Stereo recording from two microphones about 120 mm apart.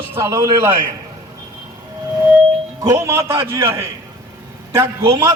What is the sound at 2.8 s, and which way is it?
A man's voice, 20° right (ahead or behind).